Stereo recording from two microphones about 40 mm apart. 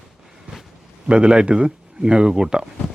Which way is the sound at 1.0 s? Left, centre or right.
Right.